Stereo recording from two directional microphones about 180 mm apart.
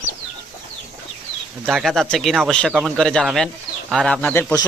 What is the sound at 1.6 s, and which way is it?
Speech, centre (ahead or behind).